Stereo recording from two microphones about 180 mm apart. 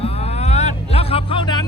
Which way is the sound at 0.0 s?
35° left (ahead or behind).